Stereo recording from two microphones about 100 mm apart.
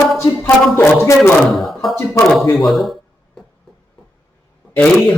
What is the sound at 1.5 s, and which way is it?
Speech, centre (ahead or behind).